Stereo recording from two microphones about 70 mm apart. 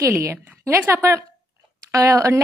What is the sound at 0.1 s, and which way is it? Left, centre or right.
A woman's voice, right.